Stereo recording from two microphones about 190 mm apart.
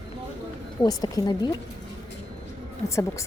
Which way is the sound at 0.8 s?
20° left (ahead or behind).